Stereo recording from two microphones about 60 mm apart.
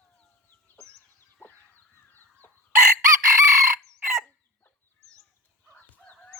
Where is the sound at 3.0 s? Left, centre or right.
Right.